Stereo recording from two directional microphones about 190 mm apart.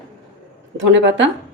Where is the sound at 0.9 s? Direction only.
65° right (ahead or behind).